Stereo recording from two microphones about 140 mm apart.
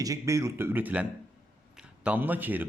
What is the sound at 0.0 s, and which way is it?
Speech, 25° right (ahead or behind).